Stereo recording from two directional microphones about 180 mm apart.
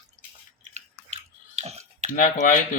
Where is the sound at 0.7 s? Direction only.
40° right (ahead or behind).